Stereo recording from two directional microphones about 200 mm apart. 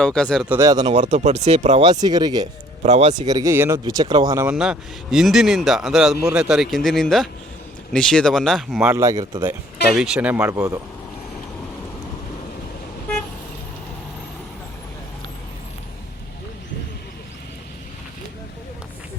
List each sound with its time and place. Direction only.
0.0 s speech: 5° left (ahead or behind)
0.4 s speech: 15° right (ahead or behind)
0.9 s speech: 35° right (ahead or behind)
1.9 s speech: 20° right (ahead or behind)
2.8 s speech: 35° right (ahead or behind)
3.2 s speech: 15° right (ahead or behind)
4.4 s speech: 5° right (ahead or behind)
8.9 s speech: 15° right (ahead or behind)
9.9 s speech: 5° right (ahead or behind)